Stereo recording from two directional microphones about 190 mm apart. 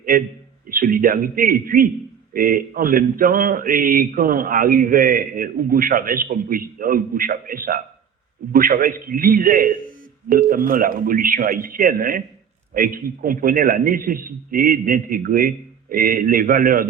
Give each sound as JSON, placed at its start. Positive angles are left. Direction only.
{"t": 0.1, "sound": "speech", "side_deg": -50}